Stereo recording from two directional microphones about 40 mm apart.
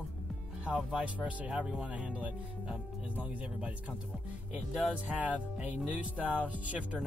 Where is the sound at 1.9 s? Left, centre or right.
Right.